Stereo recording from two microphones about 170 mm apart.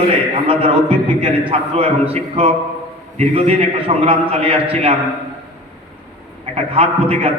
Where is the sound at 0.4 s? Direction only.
30° right (ahead or behind).